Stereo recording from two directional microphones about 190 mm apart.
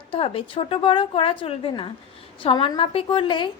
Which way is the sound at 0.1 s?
30° left (ahead or behind).